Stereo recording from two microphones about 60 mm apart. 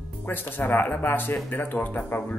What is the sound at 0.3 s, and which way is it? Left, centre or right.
Speech, left.